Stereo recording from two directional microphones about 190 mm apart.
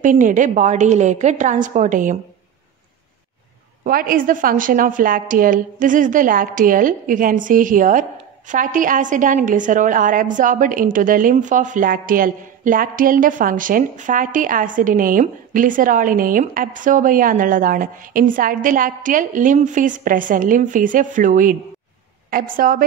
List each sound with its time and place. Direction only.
0.0 s a woman's voice: 45° right (ahead or behind)
3.8 s a woman's voice: 45° right (ahead or behind)